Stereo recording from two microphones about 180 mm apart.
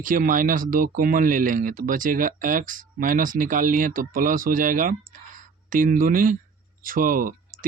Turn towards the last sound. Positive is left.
turn(degrees=-50)  # may be behind; listen again after turning